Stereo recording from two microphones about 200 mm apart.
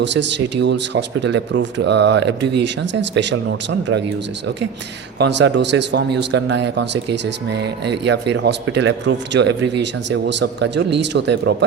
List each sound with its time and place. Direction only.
0.0 s speech: 60° right (ahead or behind)
5.2 s speech: 60° right (ahead or behind)